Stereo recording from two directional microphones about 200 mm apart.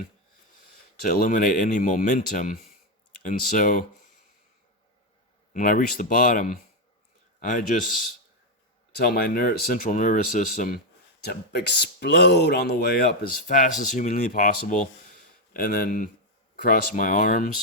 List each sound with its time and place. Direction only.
1.1 s speech: 45° left (ahead or behind)
5.5 s speech: 40° left (ahead or behind)
9.0 s speech: 50° left (ahead or behind)
11.2 s speech: 50° left (ahead or behind)
13.5 s speech: 40° left (ahead or behind)